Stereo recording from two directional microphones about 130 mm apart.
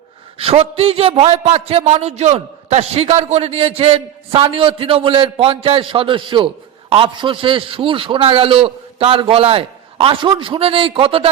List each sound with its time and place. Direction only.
0.3 s a man's voice: 50° right (ahead or behind)